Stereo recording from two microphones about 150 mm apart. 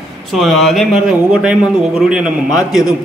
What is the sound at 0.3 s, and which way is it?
A man's voice, centre (ahead or behind).